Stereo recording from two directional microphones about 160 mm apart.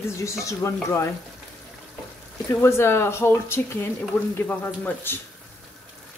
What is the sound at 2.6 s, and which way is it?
Speech, 15° left (ahead or behind).